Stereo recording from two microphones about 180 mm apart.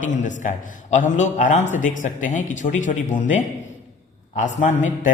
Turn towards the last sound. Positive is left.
turn(degrees=45)  # may be behind; listen again after turning